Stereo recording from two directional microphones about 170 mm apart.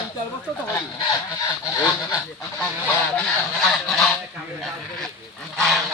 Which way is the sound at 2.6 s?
5° left (ahead or behind).